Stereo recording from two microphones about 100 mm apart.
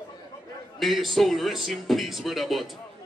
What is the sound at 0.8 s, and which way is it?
Speech, centre (ahead or behind).